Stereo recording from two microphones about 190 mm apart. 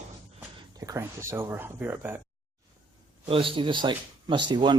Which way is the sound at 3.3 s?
25° right (ahead or behind).